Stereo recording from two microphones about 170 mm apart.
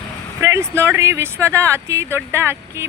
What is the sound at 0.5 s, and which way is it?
Speech, 15° right (ahead or behind).